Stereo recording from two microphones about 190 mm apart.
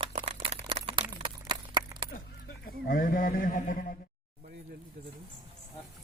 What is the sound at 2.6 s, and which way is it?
A man's voice, 50° left (ahead or behind).